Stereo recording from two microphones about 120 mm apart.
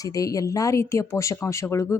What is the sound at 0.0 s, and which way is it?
Speech, 30° left (ahead or behind).